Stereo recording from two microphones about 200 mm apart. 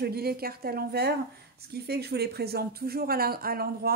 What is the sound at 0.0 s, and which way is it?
Speech, 50° right (ahead or behind).